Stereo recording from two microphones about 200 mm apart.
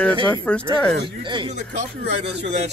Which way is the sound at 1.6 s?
60° right (ahead or behind).